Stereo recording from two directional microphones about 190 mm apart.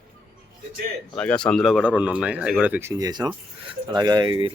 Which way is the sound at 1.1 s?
5° left (ahead or behind).